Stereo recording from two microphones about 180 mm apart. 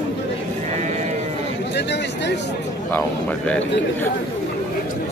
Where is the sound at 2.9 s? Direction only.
5° left (ahead or behind).